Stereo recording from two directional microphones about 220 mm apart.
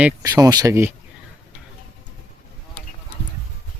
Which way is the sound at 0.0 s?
15° right (ahead or behind).